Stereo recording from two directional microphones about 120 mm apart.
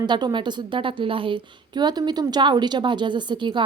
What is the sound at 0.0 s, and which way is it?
A woman's voice, 35° right (ahead or behind).